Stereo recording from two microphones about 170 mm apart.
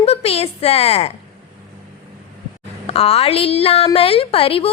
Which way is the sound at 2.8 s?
35° left (ahead or behind).